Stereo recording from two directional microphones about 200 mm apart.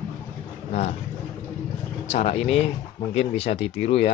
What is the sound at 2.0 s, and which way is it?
Speech, 30° left (ahead or behind).